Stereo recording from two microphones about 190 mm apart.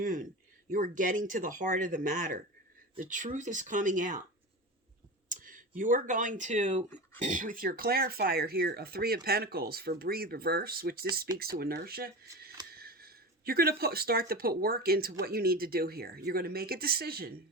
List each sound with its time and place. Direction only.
0.0 s speech: 45° right (ahead or behind)
5.3 s speech: 45° right (ahead or behind)